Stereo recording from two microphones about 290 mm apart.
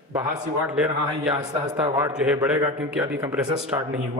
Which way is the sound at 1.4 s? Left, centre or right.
Centre.